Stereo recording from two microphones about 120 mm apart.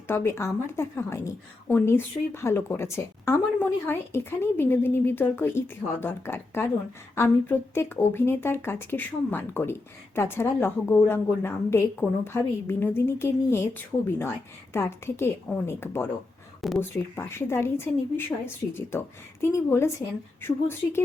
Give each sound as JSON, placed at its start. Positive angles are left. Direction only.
{"t": 0.1, "sound": "a woman's voice", "side_deg": 20}
{"t": 16.6, "sound": "speech", "side_deg": 0}
{"t": 17.2, "sound": "a woman's voice", "side_deg": 20}